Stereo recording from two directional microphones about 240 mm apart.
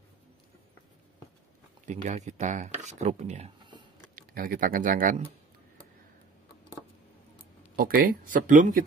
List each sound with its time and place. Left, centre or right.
1.9 s speech: right
4.1 s speech: right
7.7 s speech: right